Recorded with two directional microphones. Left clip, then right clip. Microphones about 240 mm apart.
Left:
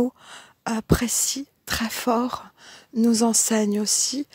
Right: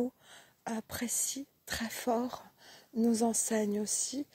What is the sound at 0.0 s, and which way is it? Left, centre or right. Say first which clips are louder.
Speech: left 11 dB; left.